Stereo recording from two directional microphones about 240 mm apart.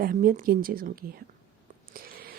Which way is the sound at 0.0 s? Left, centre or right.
Right.